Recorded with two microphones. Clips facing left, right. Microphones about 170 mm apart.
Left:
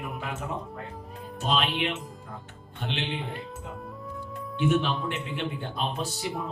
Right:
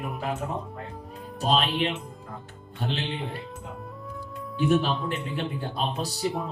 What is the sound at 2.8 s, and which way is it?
Speech, 40° right (ahead or behind).